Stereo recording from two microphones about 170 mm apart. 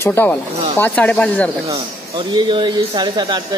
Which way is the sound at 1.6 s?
25° right (ahead or behind).